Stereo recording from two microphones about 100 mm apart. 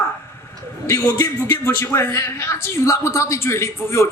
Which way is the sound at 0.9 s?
30° left (ahead or behind).